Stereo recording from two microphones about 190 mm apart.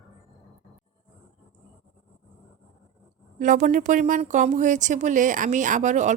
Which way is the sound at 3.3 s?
45° right (ahead or behind).